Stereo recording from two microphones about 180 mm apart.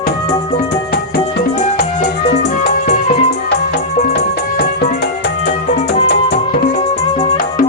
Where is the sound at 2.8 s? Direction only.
40° left (ahead or behind).